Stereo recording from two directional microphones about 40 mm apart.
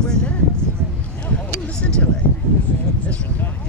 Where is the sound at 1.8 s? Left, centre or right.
Left.